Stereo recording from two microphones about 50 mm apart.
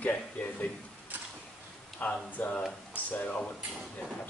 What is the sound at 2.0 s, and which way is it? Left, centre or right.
A man's voice, left.